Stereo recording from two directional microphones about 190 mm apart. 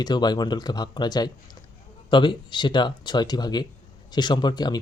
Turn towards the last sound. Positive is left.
turn(degrees=20)  # may be behind; listen again after turning